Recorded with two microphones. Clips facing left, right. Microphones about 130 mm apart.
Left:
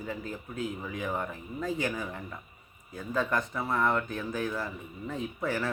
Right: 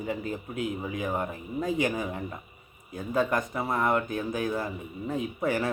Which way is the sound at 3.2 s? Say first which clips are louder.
Right 3 dB; 15° right (ahead or behind).